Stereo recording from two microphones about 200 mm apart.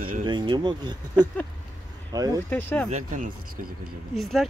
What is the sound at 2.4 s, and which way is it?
Speech, 10° left (ahead or behind).